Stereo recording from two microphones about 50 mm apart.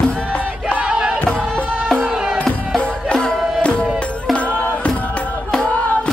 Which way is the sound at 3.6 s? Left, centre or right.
Left.